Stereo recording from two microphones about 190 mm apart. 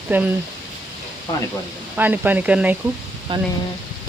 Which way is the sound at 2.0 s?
10° right (ahead or behind).